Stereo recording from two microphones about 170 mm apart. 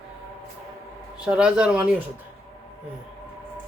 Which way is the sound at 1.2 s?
5° right (ahead or behind).